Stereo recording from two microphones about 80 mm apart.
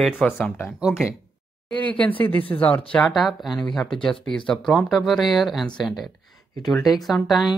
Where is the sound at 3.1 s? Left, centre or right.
Centre.